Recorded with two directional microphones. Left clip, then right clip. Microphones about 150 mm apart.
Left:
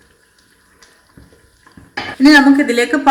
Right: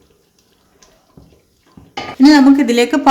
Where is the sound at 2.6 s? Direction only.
90° right.